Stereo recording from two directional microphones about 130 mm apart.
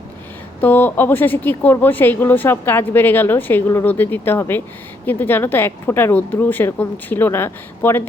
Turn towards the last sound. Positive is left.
turn(degrees=20)  # may be behind; listen again after turning